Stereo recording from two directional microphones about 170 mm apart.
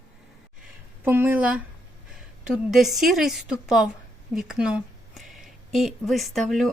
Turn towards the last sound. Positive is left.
turn(degrees=0)  # may be behind; listen again after turning